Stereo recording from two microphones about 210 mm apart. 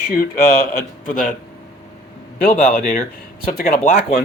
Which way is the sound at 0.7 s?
40° left (ahead or behind).